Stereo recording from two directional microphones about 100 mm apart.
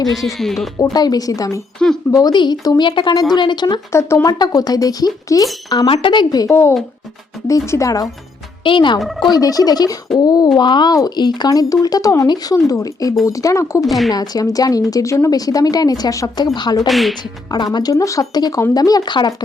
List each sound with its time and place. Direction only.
0.3 s speech: centre (ahead or behind)
0.9 s speech: 40° left (ahead or behind)
2.1 s a woman's voice: 45° left (ahead or behind)
3.9 s speech: 30° left (ahead or behind)
5.9 s a woman's voice: 55° left (ahead or behind)
6.5 s speech: 25° left (ahead or behind)
8.6 s speech: 55° left (ahead or behind)
9.0 s speech: centre (ahead or behind)
9.2 s speech: 40° left (ahead or behind)
13.8 s speech: centre (ahead or behind)
14.1 s a woman's voice: 40° left (ahead or behind)
16.8 s speech: centre (ahead or behind)
17.5 s speech: 45° left (ahead or behind)